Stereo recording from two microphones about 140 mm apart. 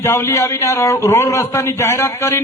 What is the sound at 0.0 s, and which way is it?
A man's voice, 20° left (ahead or behind).